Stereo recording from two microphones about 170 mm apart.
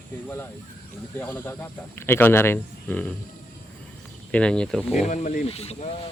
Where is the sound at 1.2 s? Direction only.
10° left (ahead or behind).